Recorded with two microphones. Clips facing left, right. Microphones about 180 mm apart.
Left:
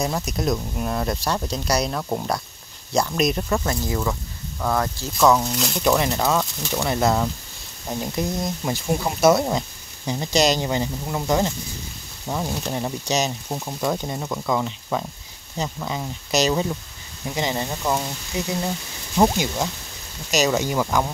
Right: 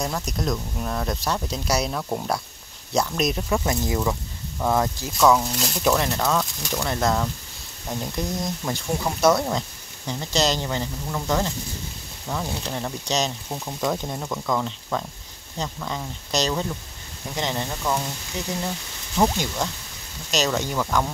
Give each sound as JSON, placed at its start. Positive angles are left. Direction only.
{"t": 0.0, "sound": "speech", "side_deg": 10}
{"t": 3.6, "sound": "speech", "side_deg": -15}
{"t": 5.2, "sound": "speech", "side_deg": 0}